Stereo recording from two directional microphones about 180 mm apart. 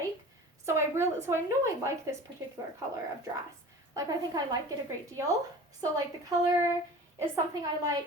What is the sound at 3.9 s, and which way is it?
Speech, 20° right (ahead or behind).